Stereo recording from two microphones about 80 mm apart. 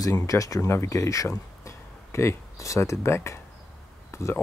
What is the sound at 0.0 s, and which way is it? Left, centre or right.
Speech, left.